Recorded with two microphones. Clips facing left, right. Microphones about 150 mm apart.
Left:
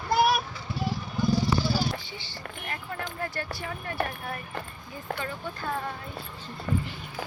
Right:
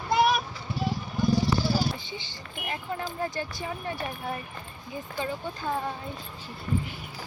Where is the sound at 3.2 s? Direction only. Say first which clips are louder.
Right 2 dB; 15° right (ahead or behind).